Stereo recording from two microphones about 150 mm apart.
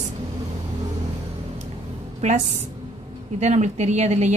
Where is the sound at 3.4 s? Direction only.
50° right (ahead or behind).